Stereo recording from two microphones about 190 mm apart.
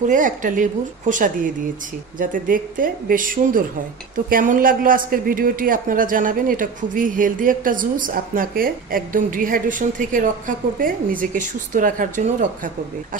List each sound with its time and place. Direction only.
0.1 s a man's voice: 45° right (ahead or behind)